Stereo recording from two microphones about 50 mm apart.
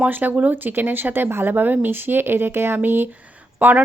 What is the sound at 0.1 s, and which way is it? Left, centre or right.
A woman's voice, right.